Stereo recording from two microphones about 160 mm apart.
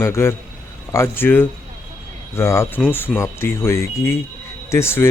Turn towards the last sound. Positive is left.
turn(degrees=15)  # may be behind; listen again after turning